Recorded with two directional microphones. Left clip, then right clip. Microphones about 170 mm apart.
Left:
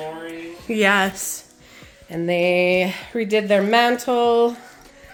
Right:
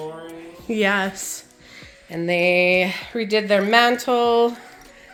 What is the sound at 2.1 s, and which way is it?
Speech, 10° left (ahead or behind).